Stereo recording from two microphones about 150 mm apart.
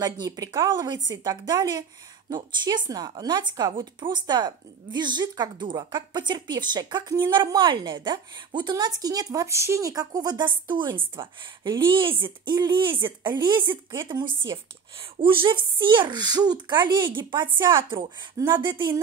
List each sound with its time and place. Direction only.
0.0 s speech: 25° right (ahead or behind)